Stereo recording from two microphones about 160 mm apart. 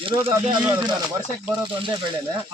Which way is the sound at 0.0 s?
35° right (ahead or behind).